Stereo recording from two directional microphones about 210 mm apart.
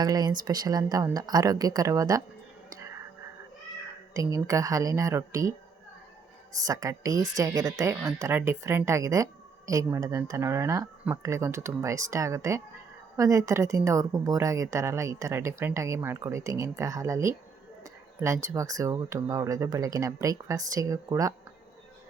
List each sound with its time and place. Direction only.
0.0 s a woman's voice: 20° right (ahead or behind)
2.7 s whispering: 15° right (ahead or behind)
4.1 s a woman's voice: 15° right (ahead or behind)
6.7 s a woman's voice: 15° right (ahead or behind)